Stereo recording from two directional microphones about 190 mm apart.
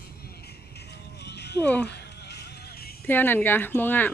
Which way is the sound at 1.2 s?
60° left (ahead or behind).